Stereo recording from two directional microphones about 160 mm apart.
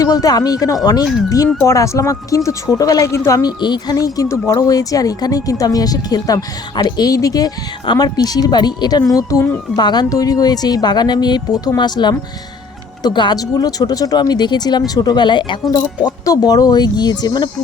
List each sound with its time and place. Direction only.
0.0 s speech: 25° left (ahead or behind)